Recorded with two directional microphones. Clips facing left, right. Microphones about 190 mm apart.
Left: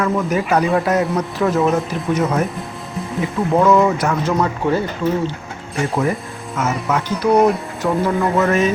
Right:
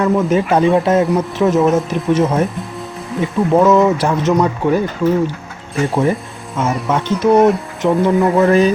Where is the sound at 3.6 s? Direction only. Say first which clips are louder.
Right 1 dB; 25° right (ahead or behind).